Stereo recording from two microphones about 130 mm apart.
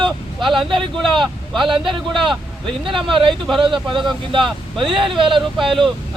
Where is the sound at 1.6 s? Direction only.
40° right (ahead or behind).